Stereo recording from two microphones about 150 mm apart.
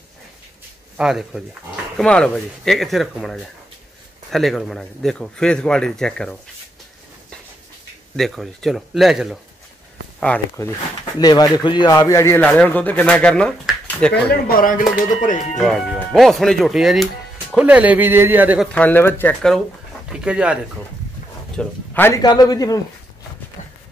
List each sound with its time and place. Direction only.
0.9 s speech: 5° right (ahead or behind)
8.2 s speech: centre (ahead or behind)
10.2 s speech: 15° left (ahead or behind)
11.1 s speech: 25° left (ahead or behind)
12.4 s speech: 10° left (ahead or behind)
14.3 s speech: 70° left (ahead or behind)
15.5 s speech: centre (ahead or behind)
18.7 s speech: 10° left (ahead or behind)
20.1 s speech: 5° right (ahead or behind)
21.5 s speech: 15° left (ahead or behind)
22.2 s speech: 25° left (ahead or behind)